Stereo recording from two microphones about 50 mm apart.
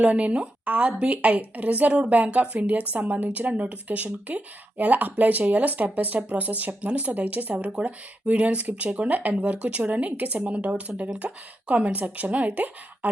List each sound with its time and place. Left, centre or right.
0.0 s a woman's voice: right